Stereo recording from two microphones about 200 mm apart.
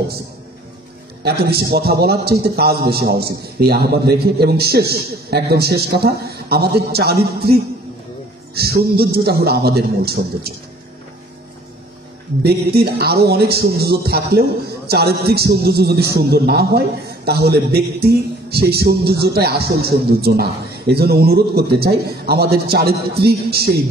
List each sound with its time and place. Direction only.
1.2 s speech: 50° right (ahead or behind)
12.4 s speech: 50° right (ahead or behind)